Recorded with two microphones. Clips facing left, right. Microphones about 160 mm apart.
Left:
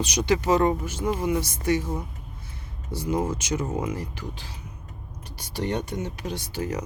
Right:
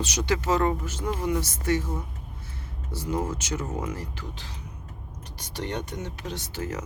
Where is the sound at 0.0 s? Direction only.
15° left (ahead or behind).